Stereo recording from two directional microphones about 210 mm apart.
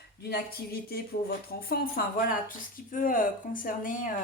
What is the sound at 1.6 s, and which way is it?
Speech, 45° left (ahead or behind).